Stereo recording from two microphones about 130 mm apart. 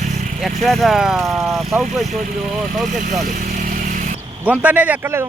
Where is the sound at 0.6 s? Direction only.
Centre (ahead or behind).